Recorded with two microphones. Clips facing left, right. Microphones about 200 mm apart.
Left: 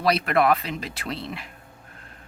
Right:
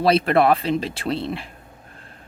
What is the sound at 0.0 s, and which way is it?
Speech, 30° right (ahead or behind).